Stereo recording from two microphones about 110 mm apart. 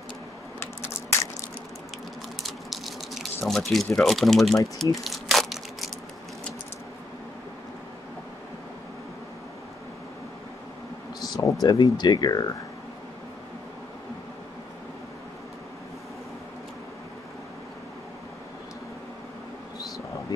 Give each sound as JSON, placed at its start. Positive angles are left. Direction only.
{"t": 0.6, "sound": "typing", "side_deg": 25}
{"t": 2.4, "sound": "a sound", "side_deg": 0}
{"t": 3.4, "sound": "speech", "side_deg": 0}
{"t": 5.0, "sound": "crushing", "side_deg": 0}
{"t": 11.1, "sound": "a sound", "side_deg": 35}
{"t": 11.6, "sound": "speech", "side_deg": 40}